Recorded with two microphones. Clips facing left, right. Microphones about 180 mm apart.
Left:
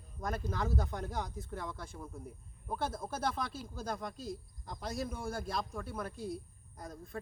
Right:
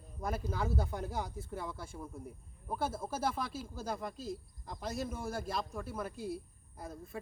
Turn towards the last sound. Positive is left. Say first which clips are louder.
# right 1 dB
turn(degrees=-5)  # may be behind; listen again after turning